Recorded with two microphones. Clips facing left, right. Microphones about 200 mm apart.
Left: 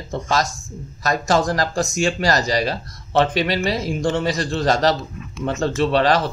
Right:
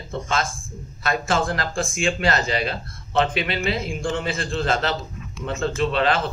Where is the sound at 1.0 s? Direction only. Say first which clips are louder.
Left 4 dB; 40° left (ahead or behind).